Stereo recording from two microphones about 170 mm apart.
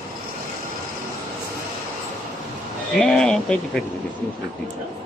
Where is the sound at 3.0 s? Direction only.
5° left (ahead or behind).